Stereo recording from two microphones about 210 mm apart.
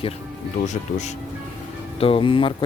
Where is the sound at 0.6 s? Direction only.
35° left (ahead or behind).